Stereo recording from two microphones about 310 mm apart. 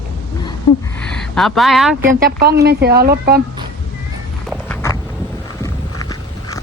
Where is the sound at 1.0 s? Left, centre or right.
Centre.